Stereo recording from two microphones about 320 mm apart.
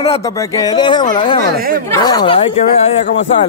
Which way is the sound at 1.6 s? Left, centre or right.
Right.